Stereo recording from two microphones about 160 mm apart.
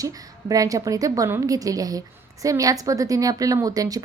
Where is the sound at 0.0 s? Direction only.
20° right (ahead or behind).